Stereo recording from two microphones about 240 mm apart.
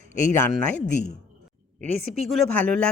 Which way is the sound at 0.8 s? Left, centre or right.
Left.